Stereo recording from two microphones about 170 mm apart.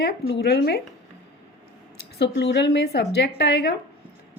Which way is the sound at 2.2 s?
85° left.